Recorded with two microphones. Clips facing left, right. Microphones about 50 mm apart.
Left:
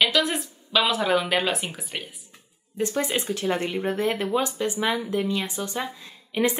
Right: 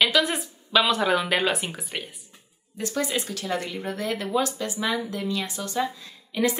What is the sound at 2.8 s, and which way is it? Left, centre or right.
Speech, left.